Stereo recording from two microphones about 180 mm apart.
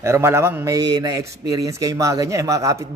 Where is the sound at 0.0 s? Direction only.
15° right (ahead or behind).